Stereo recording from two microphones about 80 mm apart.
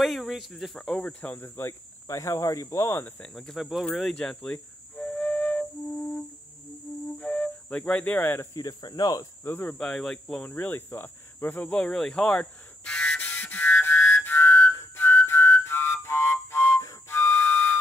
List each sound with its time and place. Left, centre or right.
0.0 s speech: centre
1.0 s speech: centre
1.4 s speech: left
3.3 s speech: centre
4.9 s flute: left
7.2 s flute: centre
8.5 s speech: left
9.4 s speech: left
9.8 s speech: centre
10.4 s speech: left
11.7 s a sound: centre; by 16.8 s left
17.1 s whistle: left